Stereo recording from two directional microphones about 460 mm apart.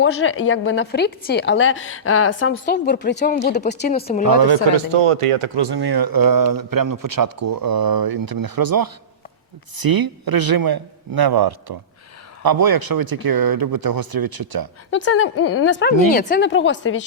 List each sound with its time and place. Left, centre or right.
0.0 s a woman's voice: left
4.9 s speech: right
14.8 s a woman's voice: left
15.4 s a woman's voice: left
15.6 s a woman's voice: left